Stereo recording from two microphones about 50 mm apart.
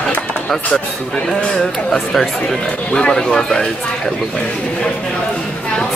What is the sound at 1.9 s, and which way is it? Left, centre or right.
Speech, centre.